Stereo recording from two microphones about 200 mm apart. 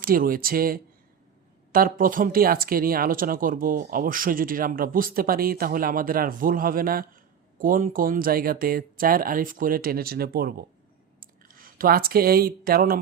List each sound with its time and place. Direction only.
0.0 s speech: 45° right (ahead or behind)